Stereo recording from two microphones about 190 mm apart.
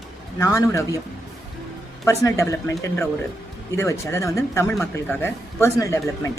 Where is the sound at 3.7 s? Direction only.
15° left (ahead or behind).